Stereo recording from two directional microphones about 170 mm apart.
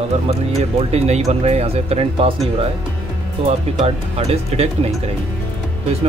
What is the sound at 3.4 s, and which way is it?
Speech, 40° right (ahead or behind).